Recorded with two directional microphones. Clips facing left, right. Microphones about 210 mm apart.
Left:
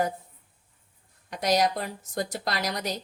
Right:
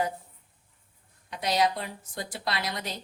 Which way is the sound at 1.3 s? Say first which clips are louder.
Left 2 dB; 45° left (ahead or behind).